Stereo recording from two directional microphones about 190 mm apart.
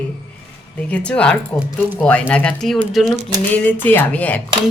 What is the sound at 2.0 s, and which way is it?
Speech, 5° left (ahead or behind).